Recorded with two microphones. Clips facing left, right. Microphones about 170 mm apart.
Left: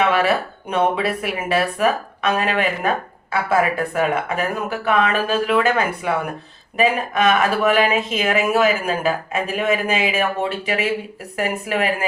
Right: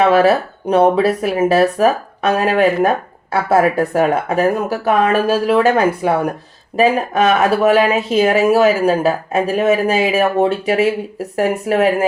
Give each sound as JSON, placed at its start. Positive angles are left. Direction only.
{"t": 0.0, "sound": "speech", "side_deg": -40}